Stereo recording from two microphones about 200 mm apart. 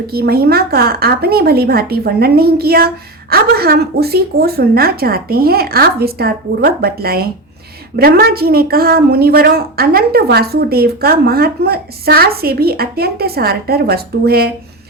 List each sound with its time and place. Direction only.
0.1 s a woman's voice: 50° right (ahead or behind)